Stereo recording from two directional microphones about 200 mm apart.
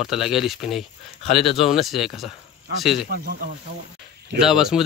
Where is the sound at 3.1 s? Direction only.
50° right (ahead or behind).